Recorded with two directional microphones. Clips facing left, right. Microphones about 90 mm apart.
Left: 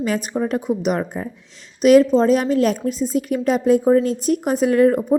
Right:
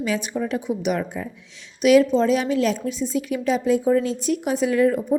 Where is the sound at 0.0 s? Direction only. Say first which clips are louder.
Left 3 dB; 40° left (ahead or behind).